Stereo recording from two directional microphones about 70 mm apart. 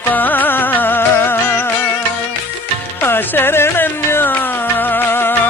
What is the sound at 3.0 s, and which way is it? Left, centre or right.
Music, left.